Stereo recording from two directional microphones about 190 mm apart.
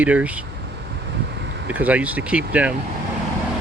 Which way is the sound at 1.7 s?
10° right (ahead or behind).